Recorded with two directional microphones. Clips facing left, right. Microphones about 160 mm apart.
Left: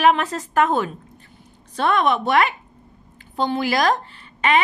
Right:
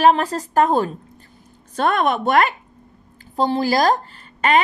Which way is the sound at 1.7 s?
45° right (ahead or behind).